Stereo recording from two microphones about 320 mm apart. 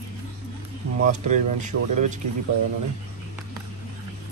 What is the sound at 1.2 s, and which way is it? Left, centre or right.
Speech, right.